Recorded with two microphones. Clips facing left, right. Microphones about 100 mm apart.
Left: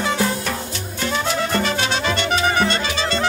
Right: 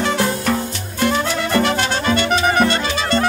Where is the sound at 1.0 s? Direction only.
60° right (ahead or behind).